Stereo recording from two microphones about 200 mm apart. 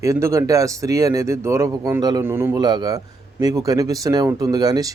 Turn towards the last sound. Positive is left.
turn(degrees=-20)  # may be behind; listen again after turning